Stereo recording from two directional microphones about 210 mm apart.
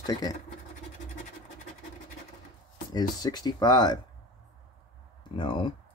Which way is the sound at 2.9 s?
20° left (ahead or behind).